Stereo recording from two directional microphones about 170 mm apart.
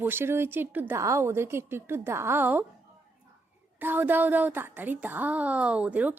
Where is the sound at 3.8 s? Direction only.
10° right (ahead or behind).